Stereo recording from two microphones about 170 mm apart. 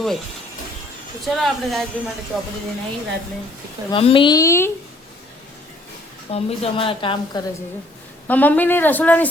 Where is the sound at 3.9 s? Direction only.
30° left (ahead or behind); by 4.7 s 15° left (ahead or behind).